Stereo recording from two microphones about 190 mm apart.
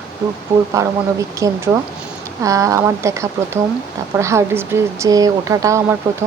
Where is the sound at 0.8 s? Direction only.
15° right (ahead or behind).